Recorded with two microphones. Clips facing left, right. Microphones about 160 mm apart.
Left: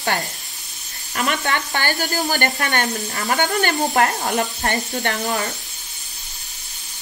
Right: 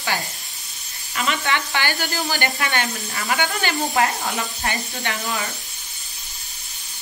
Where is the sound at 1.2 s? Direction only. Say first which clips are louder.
Left 1 dB; 50° left (ahead or behind).